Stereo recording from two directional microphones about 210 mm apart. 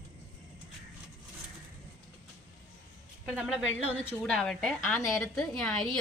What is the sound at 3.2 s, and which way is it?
A woman's voice, centre (ahead or behind).